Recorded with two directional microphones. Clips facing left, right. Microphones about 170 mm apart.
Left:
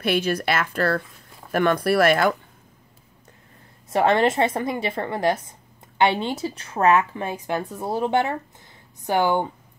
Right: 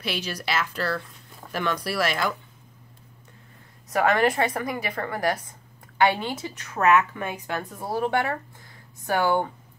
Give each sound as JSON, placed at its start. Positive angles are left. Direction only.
{"t": 0.0, "sound": "speech", "side_deg": 55}
{"t": 3.9, "sound": "a woman's voice", "side_deg": 25}